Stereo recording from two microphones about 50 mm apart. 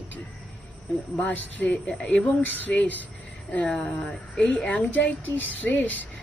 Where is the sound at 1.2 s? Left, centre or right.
Left.